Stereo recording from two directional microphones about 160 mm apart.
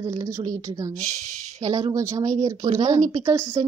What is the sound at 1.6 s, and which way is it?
Speech, 20° right (ahead or behind).